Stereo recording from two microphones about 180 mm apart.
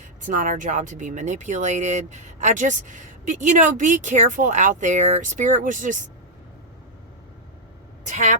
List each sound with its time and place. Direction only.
0.3 s speech: 45° right (ahead or behind)
8.0 s speech: 40° right (ahead or behind)